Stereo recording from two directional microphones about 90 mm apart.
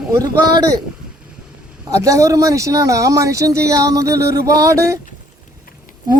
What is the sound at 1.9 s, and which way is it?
Speech, 40° right (ahead or behind).